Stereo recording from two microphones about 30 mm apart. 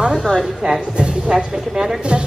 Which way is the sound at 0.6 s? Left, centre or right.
Right.